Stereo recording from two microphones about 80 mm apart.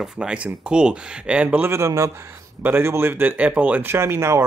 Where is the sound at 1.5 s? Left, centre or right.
Right.